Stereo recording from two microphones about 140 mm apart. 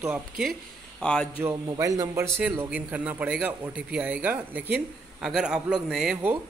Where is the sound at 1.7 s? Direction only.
25° right (ahead or behind).